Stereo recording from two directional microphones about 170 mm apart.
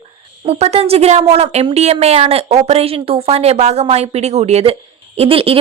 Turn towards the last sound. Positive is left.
turn(degrees=-35)  # may be behind; listen again after turning